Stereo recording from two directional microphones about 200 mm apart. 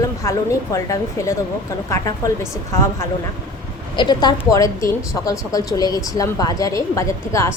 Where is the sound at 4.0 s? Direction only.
20° left (ahead or behind).